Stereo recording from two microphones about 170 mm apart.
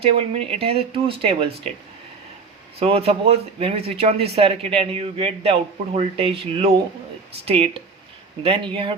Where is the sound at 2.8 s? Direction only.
35° right (ahead or behind).